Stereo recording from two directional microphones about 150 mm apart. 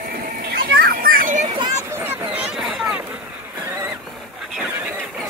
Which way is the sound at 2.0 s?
10° right (ahead or behind).